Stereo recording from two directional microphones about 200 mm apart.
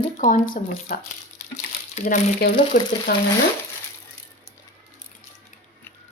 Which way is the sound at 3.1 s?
50° left (ahead or behind).